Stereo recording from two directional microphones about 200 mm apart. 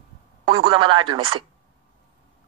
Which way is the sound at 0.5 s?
25° right (ahead or behind).